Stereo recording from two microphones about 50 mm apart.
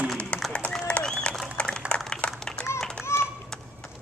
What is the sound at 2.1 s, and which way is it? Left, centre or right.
Run, centre.